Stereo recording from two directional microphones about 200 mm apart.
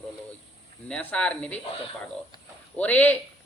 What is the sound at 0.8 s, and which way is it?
Speech, 5° left (ahead or behind).